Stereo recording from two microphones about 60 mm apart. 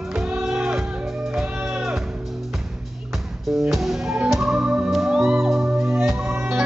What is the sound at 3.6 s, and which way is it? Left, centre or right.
Music, centre.